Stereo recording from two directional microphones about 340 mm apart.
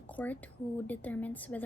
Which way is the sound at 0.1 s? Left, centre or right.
Centre.